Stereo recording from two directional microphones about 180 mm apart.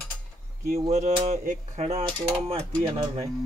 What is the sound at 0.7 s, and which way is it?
Speech, 40° right (ahead or behind).